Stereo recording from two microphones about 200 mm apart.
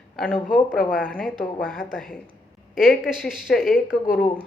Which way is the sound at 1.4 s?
45° left (ahead or behind).